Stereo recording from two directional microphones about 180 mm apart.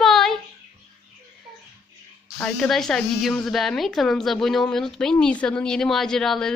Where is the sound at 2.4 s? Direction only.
5° left (ahead or behind).